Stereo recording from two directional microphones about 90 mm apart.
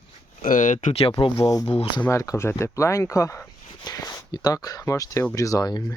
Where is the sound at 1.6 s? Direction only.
90° left.